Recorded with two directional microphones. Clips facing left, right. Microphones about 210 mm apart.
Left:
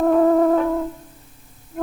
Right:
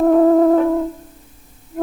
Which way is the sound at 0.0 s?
25° right (ahead or behind).